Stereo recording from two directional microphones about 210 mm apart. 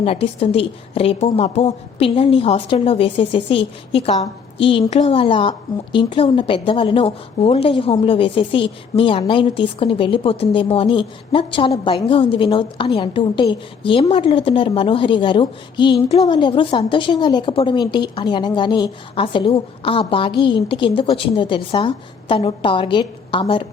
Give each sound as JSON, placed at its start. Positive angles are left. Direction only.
{"t": 0.0, "sound": "a woman's voice", "side_deg": 25}